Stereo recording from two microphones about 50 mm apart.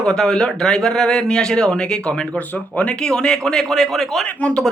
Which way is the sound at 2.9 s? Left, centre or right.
Centre.